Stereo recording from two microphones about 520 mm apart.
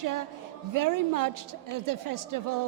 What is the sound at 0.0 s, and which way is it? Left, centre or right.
A woman's voice, right.